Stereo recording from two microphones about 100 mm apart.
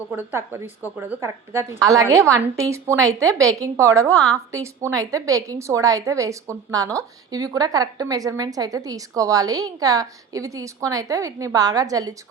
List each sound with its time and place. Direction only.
0.2 s a woman's voice: 25° right (ahead or behind)